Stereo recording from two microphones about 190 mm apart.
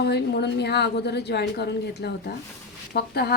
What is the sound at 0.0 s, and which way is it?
A woman's voice, 60° left (ahead or behind).